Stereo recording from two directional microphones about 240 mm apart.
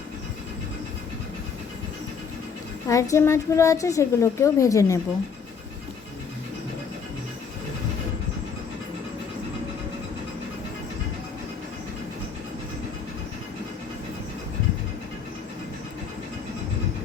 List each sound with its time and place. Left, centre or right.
2.8 s a woman's voice: centre